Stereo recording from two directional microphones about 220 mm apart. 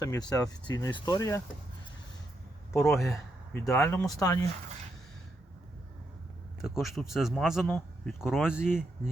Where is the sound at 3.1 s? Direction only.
15° left (ahead or behind).